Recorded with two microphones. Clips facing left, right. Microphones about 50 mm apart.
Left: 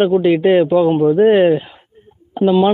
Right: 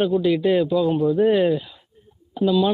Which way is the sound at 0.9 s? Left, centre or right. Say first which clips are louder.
Left 7 dB; left.